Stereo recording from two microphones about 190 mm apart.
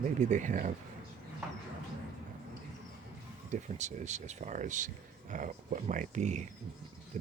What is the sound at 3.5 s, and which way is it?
Speech, 40° right (ahead or behind).